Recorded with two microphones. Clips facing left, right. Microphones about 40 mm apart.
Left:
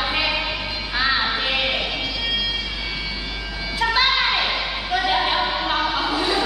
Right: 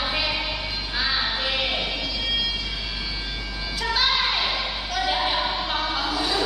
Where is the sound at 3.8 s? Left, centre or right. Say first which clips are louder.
Left 4 dB; left.